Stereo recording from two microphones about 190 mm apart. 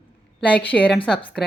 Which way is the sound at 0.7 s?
10° left (ahead or behind).